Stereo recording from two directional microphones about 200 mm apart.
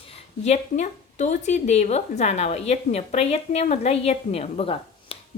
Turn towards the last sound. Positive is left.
turn(degrees=30)  # may be behind; listen again after turning